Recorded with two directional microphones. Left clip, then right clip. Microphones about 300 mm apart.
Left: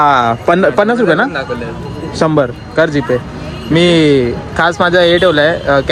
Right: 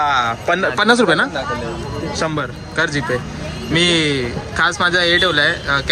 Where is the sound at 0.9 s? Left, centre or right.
Centre.